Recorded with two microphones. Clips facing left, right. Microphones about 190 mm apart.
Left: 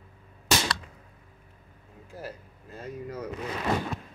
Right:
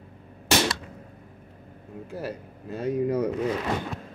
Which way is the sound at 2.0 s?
70° right (ahead or behind).